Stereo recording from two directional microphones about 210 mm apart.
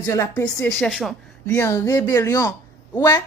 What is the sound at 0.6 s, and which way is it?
Speech, 5° left (ahead or behind).